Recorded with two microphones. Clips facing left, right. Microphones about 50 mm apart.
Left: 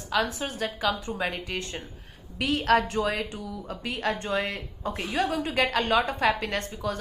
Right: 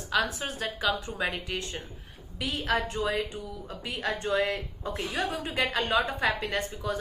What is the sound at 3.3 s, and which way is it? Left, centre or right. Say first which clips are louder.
A woman's voice: left 3 dB; left.